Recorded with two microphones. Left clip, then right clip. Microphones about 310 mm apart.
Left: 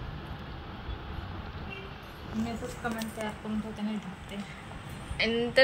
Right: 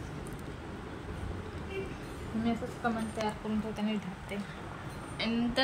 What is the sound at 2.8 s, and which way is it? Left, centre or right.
Speech, right.